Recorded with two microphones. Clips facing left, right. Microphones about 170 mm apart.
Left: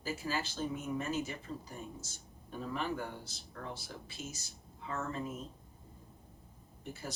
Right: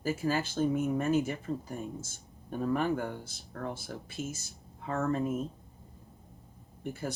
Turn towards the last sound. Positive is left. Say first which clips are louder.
# right 7 dB
turn(degrees=-55)  # may be behind; listen again after turning